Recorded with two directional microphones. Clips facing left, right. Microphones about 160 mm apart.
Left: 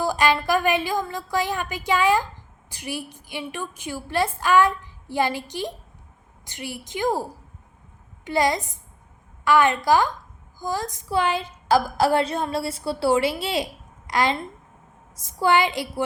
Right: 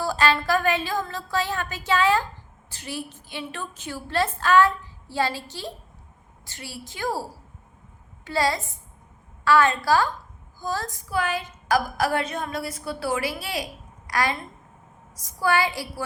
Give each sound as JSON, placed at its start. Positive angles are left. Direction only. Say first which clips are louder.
{"t": 0.0, "sound": "a woman's voice", "louder": "left 2 dB", "side_deg": 15}